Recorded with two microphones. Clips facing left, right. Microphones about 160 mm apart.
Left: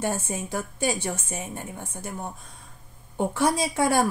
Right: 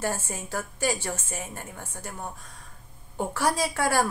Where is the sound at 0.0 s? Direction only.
20° left (ahead or behind).